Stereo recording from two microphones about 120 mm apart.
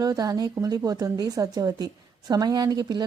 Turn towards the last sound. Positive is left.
turn(degrees=-35)  # may be behind; listen again after turning